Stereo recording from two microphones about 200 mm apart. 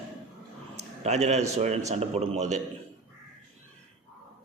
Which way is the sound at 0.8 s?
35° right (ahead or behind).